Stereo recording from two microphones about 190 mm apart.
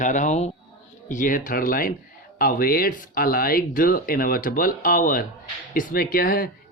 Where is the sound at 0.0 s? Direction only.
40° left (ahead or behind).